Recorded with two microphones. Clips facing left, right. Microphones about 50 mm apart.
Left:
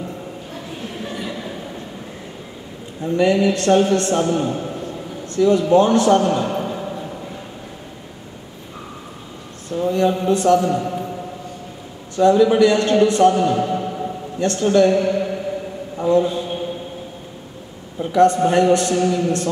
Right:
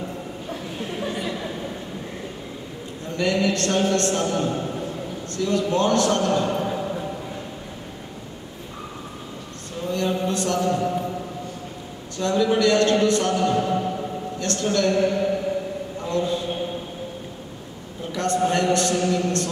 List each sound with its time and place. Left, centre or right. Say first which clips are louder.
1.0 s a sound: even; centre
3.2 s a man's voice: left 5 dB; centre
9.8 s speech: left 6 dB; centre
10.7 s a man's voice: left 1 dB; centre
12.2 s a man's voice: left 7 dB; centre
15.0 s music: left 2 dB; centre
16.0 s a man's voice: left 8 dB; centre
18.1 s a man's voice: left 8 dB; centre
18.9 s a man's voice: left 4 dB; centre